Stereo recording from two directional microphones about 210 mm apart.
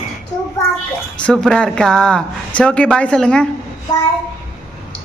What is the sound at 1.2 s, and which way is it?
Speech, 5° left (ahead or behind).